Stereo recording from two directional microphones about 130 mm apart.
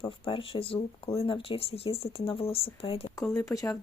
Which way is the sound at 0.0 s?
40° left (ahead or behind).